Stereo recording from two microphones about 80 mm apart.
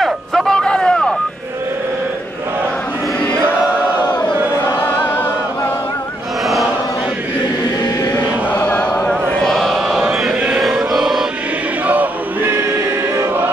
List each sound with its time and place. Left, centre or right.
0.0 s a sound: centre
4.8 s music: left
8.5 s chant: centre
9.1 s chant: centre
10.0 s chant: centre
10.7 s choir: centre
11.9 s choir: right